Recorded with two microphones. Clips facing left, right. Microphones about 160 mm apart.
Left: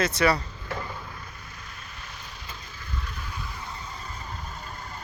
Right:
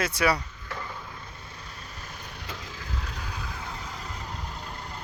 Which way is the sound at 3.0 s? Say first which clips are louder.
Left 2 dB; 90° right.